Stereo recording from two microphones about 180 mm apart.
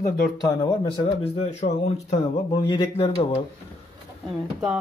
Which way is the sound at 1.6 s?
40° left (ahead or behind).